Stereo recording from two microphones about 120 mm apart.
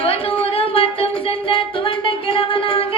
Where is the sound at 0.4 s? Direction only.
55° left (ahead or behind).